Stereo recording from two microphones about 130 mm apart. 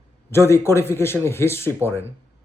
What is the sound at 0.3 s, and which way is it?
Speech, 20° left (ahead or behind).